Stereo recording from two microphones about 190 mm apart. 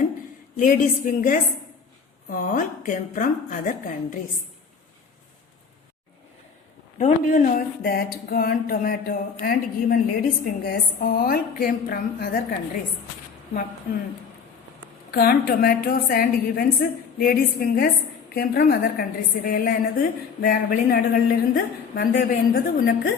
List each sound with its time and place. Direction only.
0.5 s a woman's voice: 45° left (ahead or behind)
7.0 s a woman's voice: 45° left (ahead or behind)
15.1 s a woman's voice: 55° left (ahead or behind)